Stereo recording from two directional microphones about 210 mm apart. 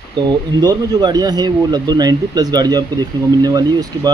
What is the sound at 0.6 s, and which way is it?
Speech, 20° right (ahead or behind).